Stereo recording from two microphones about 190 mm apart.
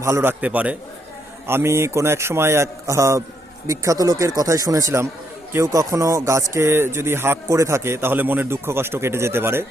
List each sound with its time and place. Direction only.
0.0 s speech: 15° right (ahead or behind)